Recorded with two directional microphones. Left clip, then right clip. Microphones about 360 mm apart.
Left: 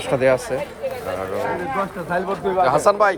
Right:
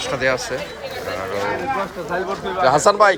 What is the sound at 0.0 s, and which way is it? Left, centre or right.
Speech, centre.